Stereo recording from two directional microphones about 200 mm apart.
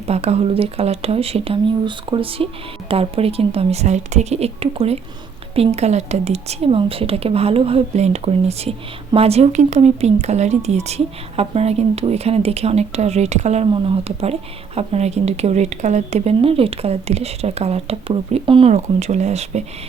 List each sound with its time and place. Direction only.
0.1 s speech: 30° right (ahead or behind)